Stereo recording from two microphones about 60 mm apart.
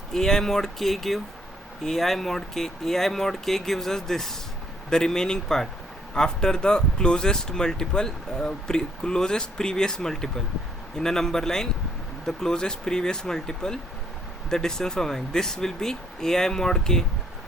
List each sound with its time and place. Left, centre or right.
0.1 s speech: centre